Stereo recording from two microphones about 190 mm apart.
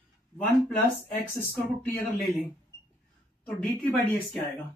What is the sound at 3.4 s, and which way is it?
Speech, 5° left (ahead or behind).